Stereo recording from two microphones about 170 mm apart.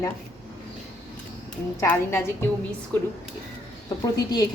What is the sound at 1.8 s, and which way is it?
A woman's voice, 10° left (ahead or behind).